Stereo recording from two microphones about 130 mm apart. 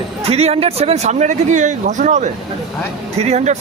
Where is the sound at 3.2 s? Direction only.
60° right (ahead or behind).